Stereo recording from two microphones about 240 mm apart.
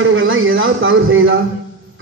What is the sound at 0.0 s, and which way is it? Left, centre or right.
A man's voice, right.